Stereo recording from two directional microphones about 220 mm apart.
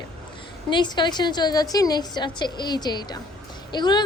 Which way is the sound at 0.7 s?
20° left (ahead or behind).